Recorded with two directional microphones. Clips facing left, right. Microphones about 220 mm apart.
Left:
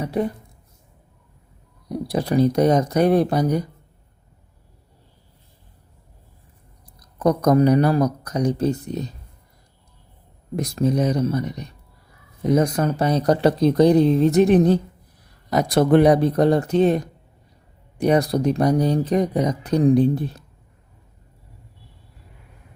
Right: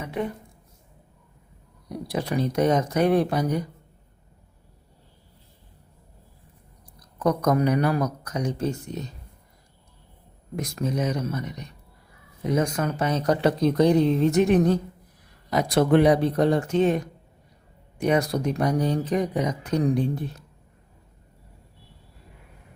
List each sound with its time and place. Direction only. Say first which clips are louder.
0.0 s a sound: left 6 dB; 35° left (ahead or behind)
2.0 s speech: left 7 dB; 35° left (ahead or behind)
7.2 s speech: left 5 dB; 35° left (ahead or behind)
10.5 s speech: left 7 dB; 35° left (ahead or behind)
15.4 s speech: left 3 dB; 40° left (ahead or behind)